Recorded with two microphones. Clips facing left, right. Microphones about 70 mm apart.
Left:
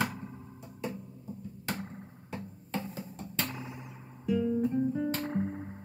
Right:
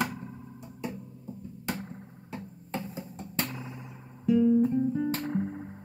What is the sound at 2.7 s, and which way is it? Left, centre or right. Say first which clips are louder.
Music: right 1 dB; centre.